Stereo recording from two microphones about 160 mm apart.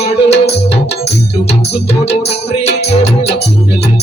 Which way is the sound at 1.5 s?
40° left (ahead or behind).